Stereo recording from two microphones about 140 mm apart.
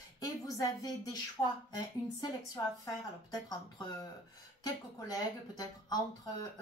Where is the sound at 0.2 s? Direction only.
25° left (ahead or behind).